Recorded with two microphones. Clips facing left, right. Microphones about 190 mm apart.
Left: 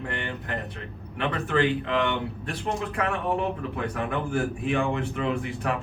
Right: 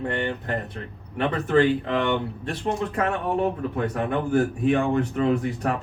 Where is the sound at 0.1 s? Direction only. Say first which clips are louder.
Right 6 dB; 35° right (ahead or behind).